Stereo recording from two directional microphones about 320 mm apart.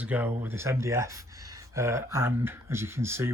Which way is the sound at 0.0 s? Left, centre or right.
Centre.